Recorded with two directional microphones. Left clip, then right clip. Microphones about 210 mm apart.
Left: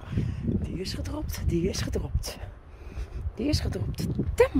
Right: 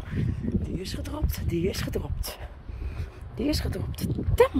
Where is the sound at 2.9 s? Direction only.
5° left (ahead or behind).